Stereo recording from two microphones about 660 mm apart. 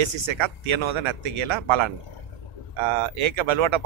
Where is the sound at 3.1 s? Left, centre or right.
Right.